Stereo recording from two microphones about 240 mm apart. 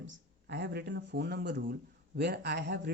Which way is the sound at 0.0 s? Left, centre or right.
Right.